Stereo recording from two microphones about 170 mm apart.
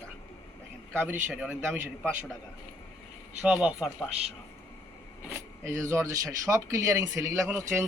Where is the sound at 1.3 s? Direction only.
5° right (ahead or behind).